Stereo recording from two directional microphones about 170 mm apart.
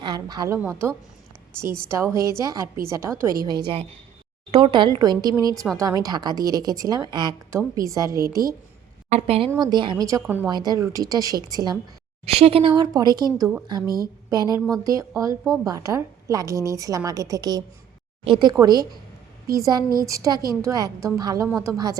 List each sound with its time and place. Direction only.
0.0 s a woman's voice: 25° right (ahead or behind)
3.4 s a woman's voice: 25° right (ahead or behind)
9.0 s a woman's voice: 35° right (ahead or behind)
9.5 s a woman's voice: 25° right (ahead or behind)
12.2 s a woman's voice: 35° right (ahead or behind)
12.7 s a woman's voice: 20° right (ahead or behind)